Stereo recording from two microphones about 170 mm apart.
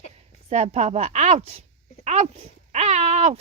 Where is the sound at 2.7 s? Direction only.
40° right (ahead or behind).